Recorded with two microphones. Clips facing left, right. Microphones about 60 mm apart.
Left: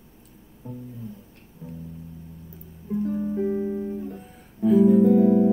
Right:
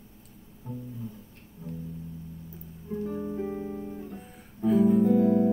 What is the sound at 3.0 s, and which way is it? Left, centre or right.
Music, centre.